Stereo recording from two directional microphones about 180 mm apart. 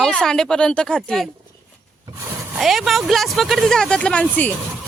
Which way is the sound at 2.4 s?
5° right (ahead or behind).